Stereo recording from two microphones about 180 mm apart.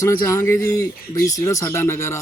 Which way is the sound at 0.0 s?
15° left (ahead or behind).